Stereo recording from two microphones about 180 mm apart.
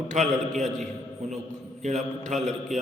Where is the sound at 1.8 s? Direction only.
40° right (ahead or behind).